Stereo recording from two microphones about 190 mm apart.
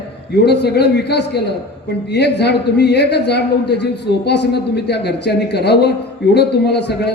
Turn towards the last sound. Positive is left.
turn(degrees=60)  # may be behind; listen again after turning